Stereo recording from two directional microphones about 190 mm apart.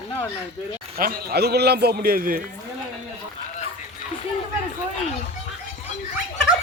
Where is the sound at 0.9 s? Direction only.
50° right (ahead or behind).